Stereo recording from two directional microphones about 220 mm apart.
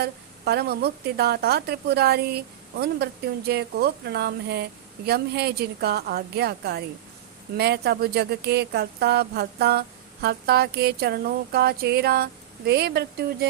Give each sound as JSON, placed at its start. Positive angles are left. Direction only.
{"t": 0.0, "sound": "a woman's voice", "side_deg": -45}